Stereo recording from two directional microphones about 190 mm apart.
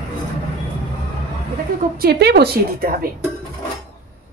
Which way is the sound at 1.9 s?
55° right (ahead or behind).